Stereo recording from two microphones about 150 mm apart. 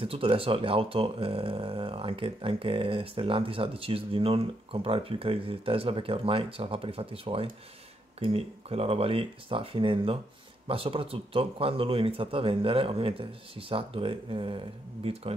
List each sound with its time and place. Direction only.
0.0 s speech: 40° right (ahead or behind)